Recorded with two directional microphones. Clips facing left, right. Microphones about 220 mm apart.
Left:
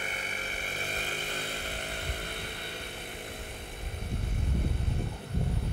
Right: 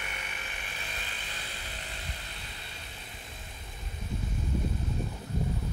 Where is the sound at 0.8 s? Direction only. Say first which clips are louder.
Left 7 dB; 50° left (ahead or behind).